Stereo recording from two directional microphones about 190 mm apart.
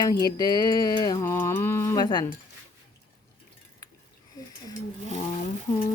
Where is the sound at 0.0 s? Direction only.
20° left (ahead or behind).